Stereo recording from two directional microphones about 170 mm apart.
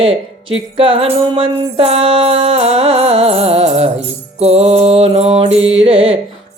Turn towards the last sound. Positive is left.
turn(degrees=-35)  # may be behind; listen again after turning